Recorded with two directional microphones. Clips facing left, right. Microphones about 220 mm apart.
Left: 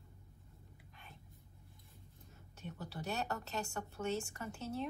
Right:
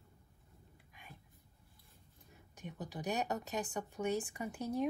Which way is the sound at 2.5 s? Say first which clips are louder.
Right 2 dB; 15° right (ahead or behind).